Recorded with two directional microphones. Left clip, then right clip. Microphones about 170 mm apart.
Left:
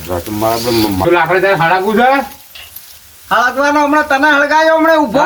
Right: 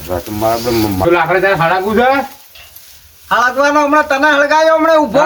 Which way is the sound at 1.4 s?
25° right (ahead or behind).